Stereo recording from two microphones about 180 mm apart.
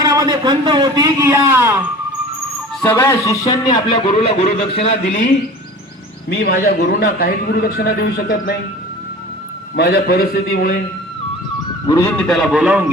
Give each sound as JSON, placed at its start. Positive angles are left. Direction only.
{"t": 0.0, "sound": "a man's voice", "side_deg": -20}
{"t": 2.8, "sound": "a man's voice", "side_deg": 15}
{"t": 6.5, "sound": "a man's voice", "side_deg": 55}
{"t": 9.7, "sound": "a man's voice", "side_deg": 65}
{"t": 11.9, "sound": "speech", "side_deg": 15}
{"t": 12.3, "sound": "a man's voice", "side_deg": 0}